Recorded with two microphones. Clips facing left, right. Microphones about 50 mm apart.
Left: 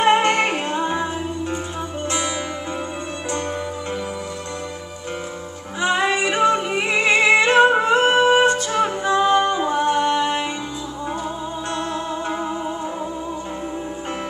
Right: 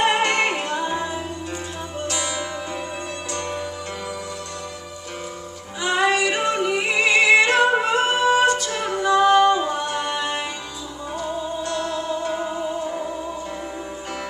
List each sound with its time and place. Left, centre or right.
0.0 s music: left
5.8 s singing: left
9.7 s music: left
11.7 s music: left